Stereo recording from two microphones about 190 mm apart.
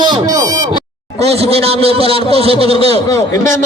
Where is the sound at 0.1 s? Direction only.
20° right (ahead or behind).